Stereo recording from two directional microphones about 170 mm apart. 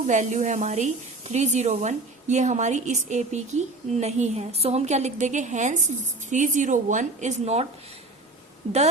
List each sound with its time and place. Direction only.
0.1 s a woman's voice: 45° right (ahead or behind)